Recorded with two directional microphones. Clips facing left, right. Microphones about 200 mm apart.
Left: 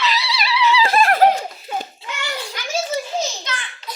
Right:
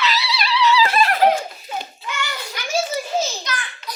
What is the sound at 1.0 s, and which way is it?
Laughter, 45° left (ahead or behind).